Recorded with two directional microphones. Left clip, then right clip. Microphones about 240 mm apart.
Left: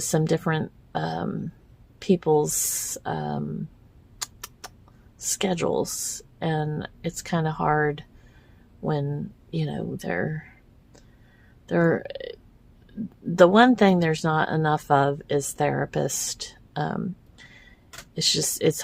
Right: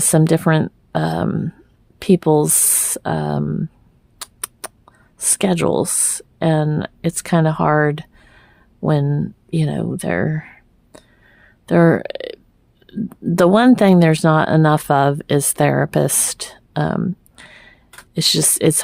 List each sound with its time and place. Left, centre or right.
0.1 s speech: right
4.2 s a sound: right
5.1 s speech: right